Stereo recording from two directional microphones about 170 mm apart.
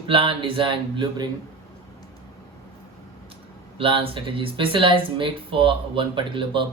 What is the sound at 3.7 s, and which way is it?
Speech, 30° right (ahead or behind).